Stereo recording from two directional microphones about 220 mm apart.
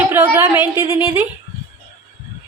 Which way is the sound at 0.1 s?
10° right (ahead or behind).